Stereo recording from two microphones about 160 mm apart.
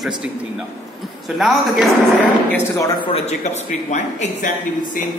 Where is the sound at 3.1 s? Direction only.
45° left (ahead or behind).